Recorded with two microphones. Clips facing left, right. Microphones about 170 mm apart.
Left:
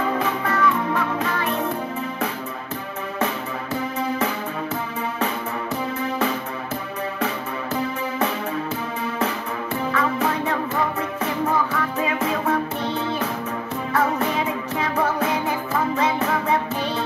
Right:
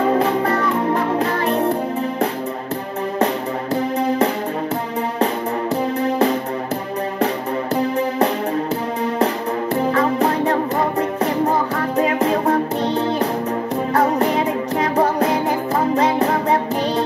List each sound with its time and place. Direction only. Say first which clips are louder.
0.0 s music: right 7 dB; 35° right (ahead or behind)
3.7 s music: right 6 dB; 35° right (ahead or behind)
5.9 s music: right 7 dB; 35° right (ahead or behind)
9.8 s music: right 4 dB; 35° right (ahead or behind)